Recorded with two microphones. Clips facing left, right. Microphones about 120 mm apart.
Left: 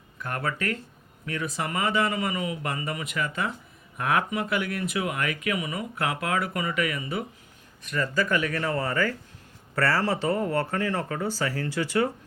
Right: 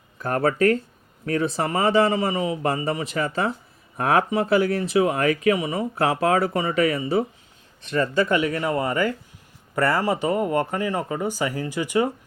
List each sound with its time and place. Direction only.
0.2 s speech: 35° right (ahead or behind); by 12.1 s 15° right (ahead or behind)